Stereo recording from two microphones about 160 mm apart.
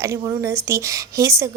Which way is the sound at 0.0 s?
20° right (ahead or behind).